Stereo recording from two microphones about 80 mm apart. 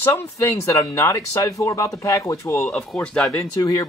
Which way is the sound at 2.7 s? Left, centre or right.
Centre.